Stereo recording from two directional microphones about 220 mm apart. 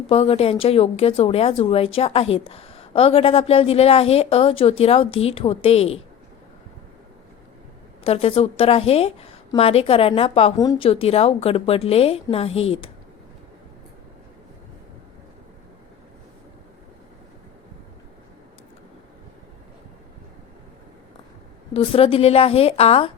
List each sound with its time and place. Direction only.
0.1 s a woman's voice: 25° left (ahead or behind)
8.0 s a woman's voice: 25° left (ahead or behind)
21.7 s a woman's voice: 25° left (ahead or behind)